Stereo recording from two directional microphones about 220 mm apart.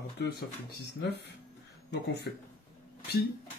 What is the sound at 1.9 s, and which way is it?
Speech, 50° left (ahead or behind).